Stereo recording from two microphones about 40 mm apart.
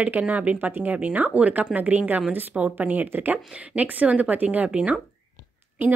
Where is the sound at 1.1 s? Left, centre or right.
Right.